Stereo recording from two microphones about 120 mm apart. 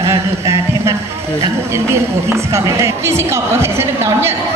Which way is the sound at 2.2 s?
25° right (ahead or behind).